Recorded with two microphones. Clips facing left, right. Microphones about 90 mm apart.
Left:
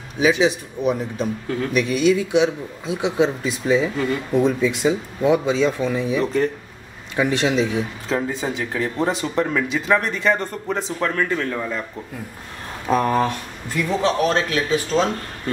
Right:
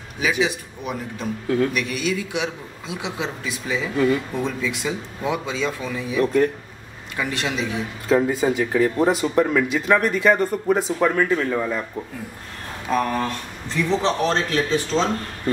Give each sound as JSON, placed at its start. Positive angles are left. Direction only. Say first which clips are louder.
{"t": 0.4, "sound": "a man's voice", "louder": "left 4 dB", "side_deg": 25}
{"t": 6.2, "sound": "speech", "louder": "right 6 dB", "side_deg": -5}
{"t": 7.2, "sound": "a man's voice", "louder": "left 6 dB", "side_deg": 20}
{"t": 8.1, "sound": "speech", "louder": "right 6 dB", "side_deg": -5}
{"t": 12.9, "sound": "a man's voice", "louder": "left 3 dB", "side_deg": 25}
{"t": 13.8, "sound": "a man's voice", "louder": "left 1 dB", "side_deg": 5}